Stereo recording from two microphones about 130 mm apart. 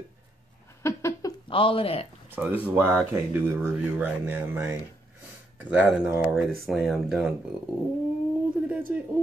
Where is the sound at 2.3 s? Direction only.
15° right (ahead or behind).